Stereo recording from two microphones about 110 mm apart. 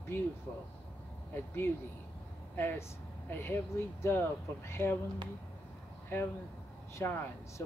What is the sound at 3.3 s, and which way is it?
Speech, 20° left (ahead or behind).